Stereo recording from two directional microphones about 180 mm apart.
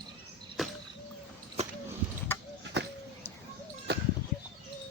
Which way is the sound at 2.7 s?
70° right (ahead or behind).